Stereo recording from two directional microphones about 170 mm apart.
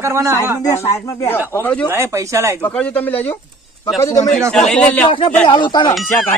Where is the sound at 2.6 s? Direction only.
5° left (ahead or behind).